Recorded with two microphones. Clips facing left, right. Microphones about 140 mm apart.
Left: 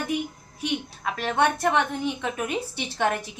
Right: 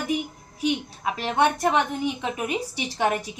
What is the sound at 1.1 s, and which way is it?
A woman's voice, 15° right (ahead or behind).